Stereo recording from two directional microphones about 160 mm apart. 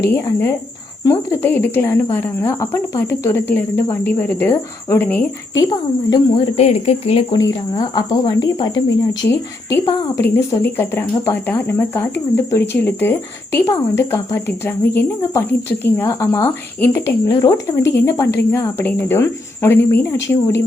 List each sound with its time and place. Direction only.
0.0 s speech: 15° left (ahead or behind)
5.5 s speech: 25° left (ahead or behind)
6.6 s speech: 40° left (ahead or behind)
7.3 s speech: 20° left (ahead or behind)
9.8 s speech: 20° left (ahead or behind)